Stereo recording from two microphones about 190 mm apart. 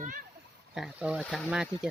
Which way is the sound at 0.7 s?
5° right (ahead or behind).